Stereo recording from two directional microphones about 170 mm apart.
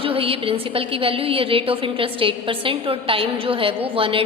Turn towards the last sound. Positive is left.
turn(degrees=-30)  # may be behind; listen again after turning